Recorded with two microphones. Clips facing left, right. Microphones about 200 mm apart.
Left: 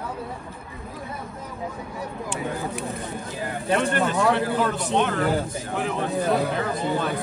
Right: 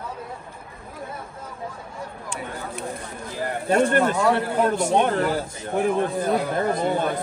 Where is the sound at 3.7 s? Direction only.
50° right (ahead or behind).